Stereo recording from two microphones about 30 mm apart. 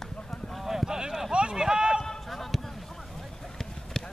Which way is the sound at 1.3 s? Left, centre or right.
Right.